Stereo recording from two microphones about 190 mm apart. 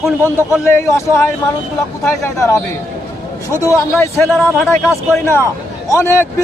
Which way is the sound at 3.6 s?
15° left (ahead or behind).